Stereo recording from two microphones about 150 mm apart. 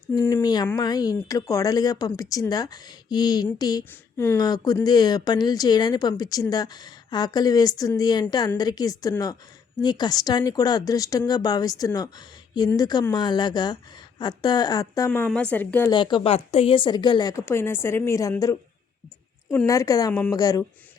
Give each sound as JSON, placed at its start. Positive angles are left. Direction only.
{"t": 0.4, "sound": "a woman's voice", "side_deg": 30}
{"t": 15.3, "sound": "a woman's voice", "side_deg": 10}
{"t": 15.9, "sound": "a woman's voice", "side_deg": 30}